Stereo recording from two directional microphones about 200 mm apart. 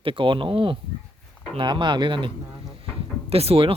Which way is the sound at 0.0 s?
25° right (ahead or behind).